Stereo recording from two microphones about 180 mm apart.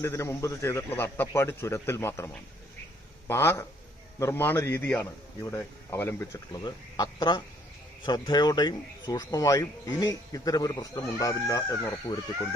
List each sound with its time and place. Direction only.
0.0 s a man's voice: 15° left (ahead or behind)